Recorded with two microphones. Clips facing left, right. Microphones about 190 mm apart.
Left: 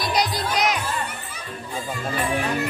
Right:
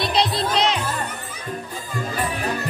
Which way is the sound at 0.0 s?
25° right (ahead or behind).